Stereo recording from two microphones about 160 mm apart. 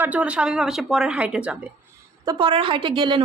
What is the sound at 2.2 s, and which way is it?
A woman's voice, 30° right (ahead or behind).